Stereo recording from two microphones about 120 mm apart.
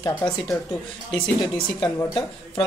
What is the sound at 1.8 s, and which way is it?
Speech, 40° left (ahead or behind).